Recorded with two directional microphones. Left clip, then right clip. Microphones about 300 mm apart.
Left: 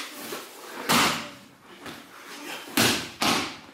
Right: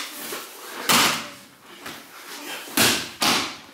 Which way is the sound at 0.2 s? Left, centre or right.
Centre.